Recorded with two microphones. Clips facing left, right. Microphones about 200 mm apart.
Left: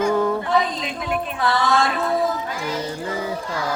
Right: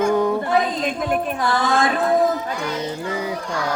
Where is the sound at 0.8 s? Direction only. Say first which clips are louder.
Right 4 dB; 45° right (ahead or behind).